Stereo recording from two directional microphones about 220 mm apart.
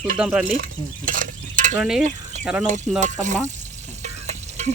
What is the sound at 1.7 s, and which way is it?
Speech, centre (ahead or behind).